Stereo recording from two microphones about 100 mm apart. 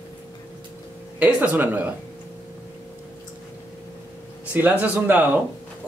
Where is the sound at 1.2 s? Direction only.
15° right (ahead or behind).